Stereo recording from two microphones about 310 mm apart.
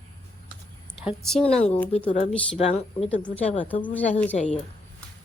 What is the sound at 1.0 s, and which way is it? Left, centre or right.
Speech, centre.